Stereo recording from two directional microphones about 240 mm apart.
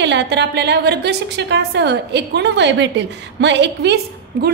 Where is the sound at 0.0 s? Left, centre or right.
Right.